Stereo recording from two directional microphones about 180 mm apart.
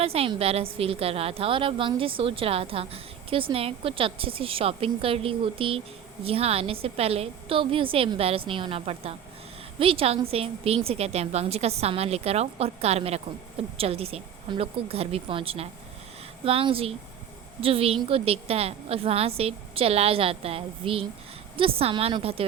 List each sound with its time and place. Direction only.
0.0 s a woman's voice: 35° right (ahead or behind)